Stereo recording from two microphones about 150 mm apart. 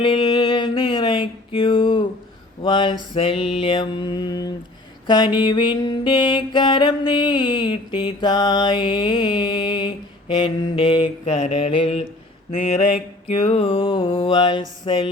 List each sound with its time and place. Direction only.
0.0 s music: 35° left (ahead or behind)
2.6 s mantra: 35° left (ahead or behind)
11.3 s mantra: 45° left (ahead or behind)
12.5 s mantra: 55° left (ahead or behind)
13.5 s mantra: 45° left (ahead or behind)
13.8 s mantra: 30° left (ahead or behind)